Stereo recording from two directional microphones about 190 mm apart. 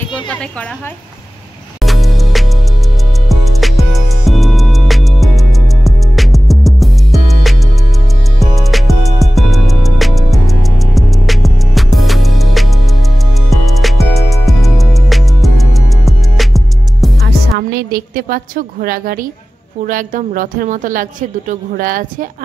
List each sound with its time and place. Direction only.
0.3 s a woman's voice: 5° left (ahead or behind)
1.8 s music: centre (ahead or behind)
17.6 s a woman's voice: 55° right (ahead or behind)